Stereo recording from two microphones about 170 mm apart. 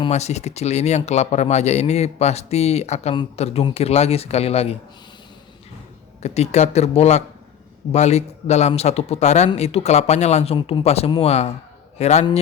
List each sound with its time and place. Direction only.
0.1 s speech: 40° left (ahead or behind)
6.2 s a man's voice: 40° left (ahead or behind)